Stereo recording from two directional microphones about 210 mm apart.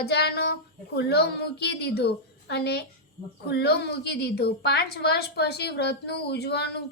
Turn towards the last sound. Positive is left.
turn(degrees=50)  # may be behind; listen again after turning